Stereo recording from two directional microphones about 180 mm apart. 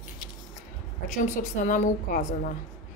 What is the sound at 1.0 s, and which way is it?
A woman's voice, 45° left (ahead or behind).